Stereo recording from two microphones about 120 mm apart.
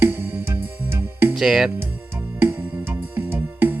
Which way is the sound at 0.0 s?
15° right (ahead or behind).